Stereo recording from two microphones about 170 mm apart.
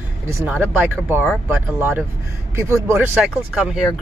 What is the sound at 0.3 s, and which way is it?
Speech, 10° right (ahead or behind).